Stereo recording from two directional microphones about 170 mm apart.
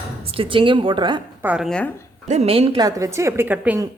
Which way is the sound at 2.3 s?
35° right (ahead or behind).